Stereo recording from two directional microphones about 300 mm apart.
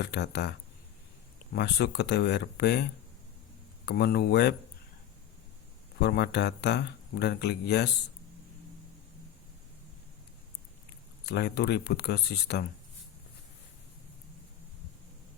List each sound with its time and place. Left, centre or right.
0.0 s speech: left
1.5 s speech: left
3.8 s speech: left
6.0 s speech: left
11.3 s speech: left